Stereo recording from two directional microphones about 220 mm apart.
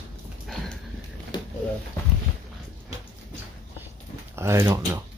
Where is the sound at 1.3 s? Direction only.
20° left (ahead or behind).